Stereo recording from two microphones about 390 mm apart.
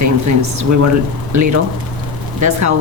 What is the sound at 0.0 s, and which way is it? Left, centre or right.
Speech, right.